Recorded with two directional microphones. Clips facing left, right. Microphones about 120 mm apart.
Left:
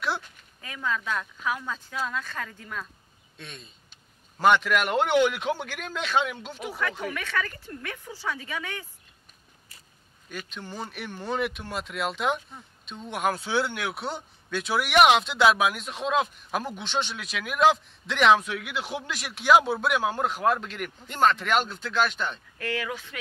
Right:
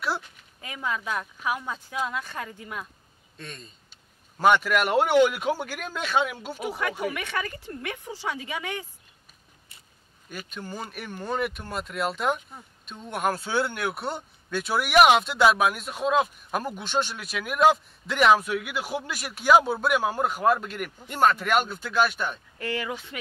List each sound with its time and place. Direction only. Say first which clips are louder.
0.6 s speech: even; 15° right (ahead or behind)
3.3 s speech: right 2 dB; centre (ahead or behind); by 8.8 s 15° right (ahead or behind)
10.3 s speech: right 1 dB; 5° right (ahead or behind)
22.6 s speech: right 1 dB; 20° right (ahead or behind)